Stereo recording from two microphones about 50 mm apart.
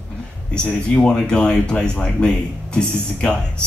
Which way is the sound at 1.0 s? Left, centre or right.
Centre.